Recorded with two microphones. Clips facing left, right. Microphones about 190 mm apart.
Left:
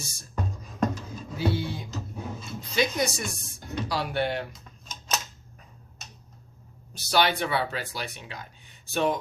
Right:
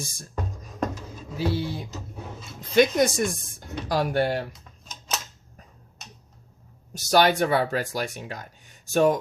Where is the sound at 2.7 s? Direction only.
50° right (ahead or behind).